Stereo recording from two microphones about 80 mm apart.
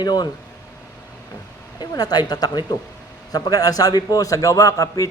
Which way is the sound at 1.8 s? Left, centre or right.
Left.